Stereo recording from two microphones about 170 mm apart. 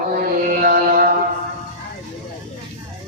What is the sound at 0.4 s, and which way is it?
Mantra, 60° right (ahead or behind).